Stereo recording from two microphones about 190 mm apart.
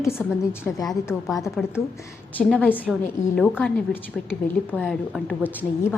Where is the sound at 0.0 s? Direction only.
15° left (ahead or behind).